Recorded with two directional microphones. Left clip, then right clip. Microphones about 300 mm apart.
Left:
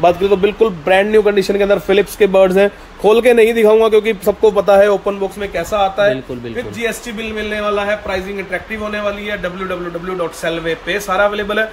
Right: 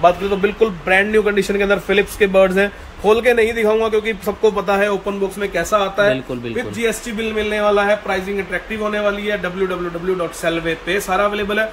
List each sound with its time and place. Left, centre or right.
0.0 s a man's voice: left
5.4 s a man's voice: centre